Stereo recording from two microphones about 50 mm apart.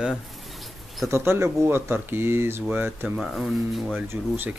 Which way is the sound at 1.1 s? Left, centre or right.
Right.